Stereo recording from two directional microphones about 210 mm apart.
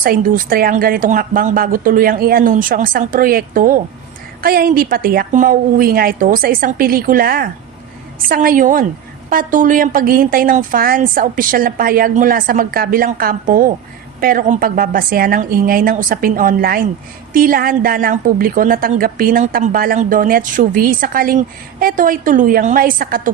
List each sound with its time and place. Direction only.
0.0 s a woman's voice: 40° right (ahead or behind)